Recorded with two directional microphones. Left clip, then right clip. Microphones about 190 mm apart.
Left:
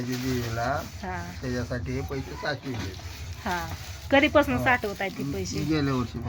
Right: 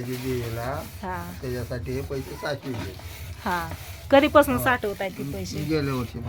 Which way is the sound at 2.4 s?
50° right (ahead or behind).